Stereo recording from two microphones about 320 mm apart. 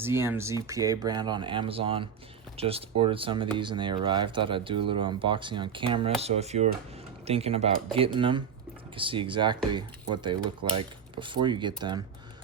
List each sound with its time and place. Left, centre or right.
0.0 s speech: centre